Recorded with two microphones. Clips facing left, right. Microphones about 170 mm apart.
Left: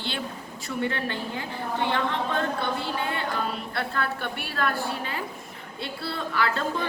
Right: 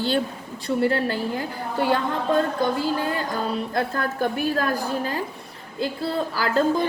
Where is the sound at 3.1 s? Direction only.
40° right (ahead or behind).